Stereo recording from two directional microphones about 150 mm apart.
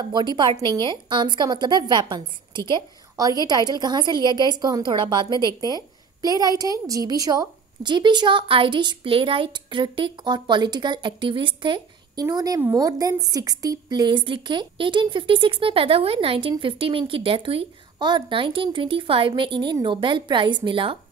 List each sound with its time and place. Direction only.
0.0 s a woman's voice: 30° right (ahead or behind)